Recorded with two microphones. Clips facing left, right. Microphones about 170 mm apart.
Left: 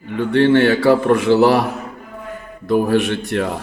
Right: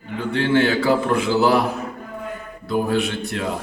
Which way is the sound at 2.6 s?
70° left (ahead or behind).